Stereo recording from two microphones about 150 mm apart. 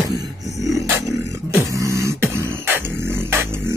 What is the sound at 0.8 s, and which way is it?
Beatboxing, 20° right (ahead or behind).